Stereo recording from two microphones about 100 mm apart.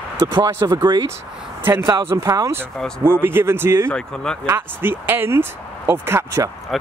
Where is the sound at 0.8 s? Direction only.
45° right (ahead or behind).